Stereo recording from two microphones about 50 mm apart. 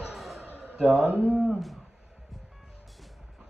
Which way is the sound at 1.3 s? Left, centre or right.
Centre.